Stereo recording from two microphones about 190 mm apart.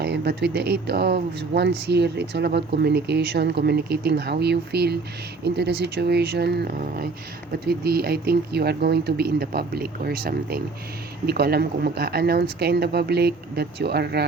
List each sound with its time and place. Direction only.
0.0 s speech: 60° right (ahead or behind)